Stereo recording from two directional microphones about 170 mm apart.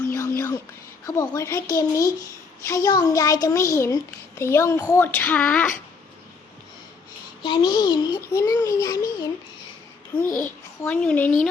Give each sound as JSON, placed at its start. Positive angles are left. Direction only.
{"t": 0.1, "sound": "a sound", "side_deg": 15}
{"t": 1.0, "sound": "a child's voice", "side_deg": 20}
{"t": 7.4, "sound": "a child's voice", "side_deg": 30}
{"t": 10.2, "sound": "a child's voice", "side_deg": 55}
{"t": 10.8, "sound": "a woman's voice", "side_deg": 10}